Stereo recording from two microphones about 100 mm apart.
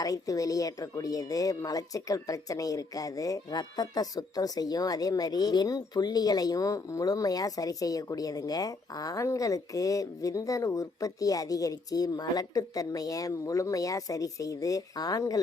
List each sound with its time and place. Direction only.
0.0 s speech: 35° left (ahead or behind)